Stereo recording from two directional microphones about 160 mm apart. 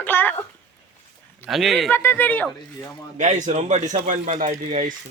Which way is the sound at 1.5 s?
Centre (ahead or behind).